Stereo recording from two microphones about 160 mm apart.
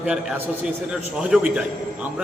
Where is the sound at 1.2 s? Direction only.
5° right (ahead or behind).